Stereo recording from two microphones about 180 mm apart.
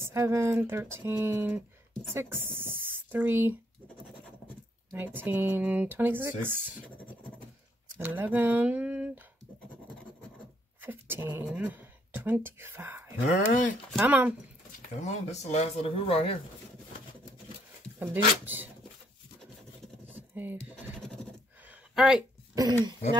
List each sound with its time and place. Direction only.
0.0 s speech: 15° right (ahead or behind)
4.9 s speech: 10° right (ahead or behind)
8.0 s speech: 10° right (ahead or behind)
10.8 s speech: 10° right (ahead or behind)
14.8 s speech: 40° left (ahead or behind)
17.9 s speech: 10° right (ahead or behind)
20.1 s computer keyboard: 10° right (ahead or behind)
21.6 s a sound: 5° right (ahead or behind)
22.5 s speech: 20° right (ahead or behind)